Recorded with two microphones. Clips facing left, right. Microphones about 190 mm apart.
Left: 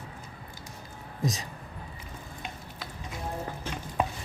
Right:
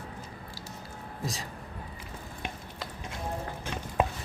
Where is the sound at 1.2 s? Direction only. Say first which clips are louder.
Left 5 dB; 20° left (ahead or behind).